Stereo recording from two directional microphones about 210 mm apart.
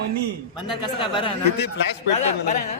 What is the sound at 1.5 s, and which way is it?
Speech, 55° left (ahead or behind).